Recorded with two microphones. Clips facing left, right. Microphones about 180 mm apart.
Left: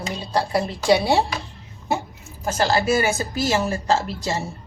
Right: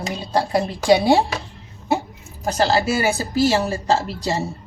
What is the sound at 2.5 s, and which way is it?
Speech, 35° right (ahead or behind).